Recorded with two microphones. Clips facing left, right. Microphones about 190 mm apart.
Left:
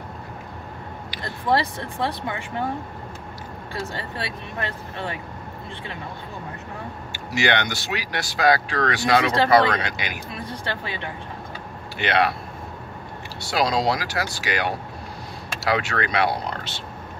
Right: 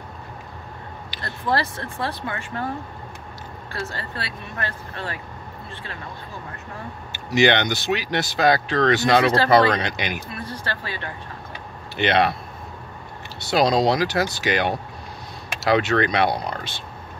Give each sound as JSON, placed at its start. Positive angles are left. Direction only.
{"t": 1.5, "sound": "speech", "side_deg": 20}
{"t": 3.8, "sound": "speech", "side_deg": 20}
{"t": 7.1, "sound": "speech", "side_deg": -20}
{"t": 10.4, "sound": "speech", "side_deg": 20}
{"t": 12.0, "sound": "speech", "side_deg": -20}
{"t": 13.4, "sound": "speech", "side_deg": -20}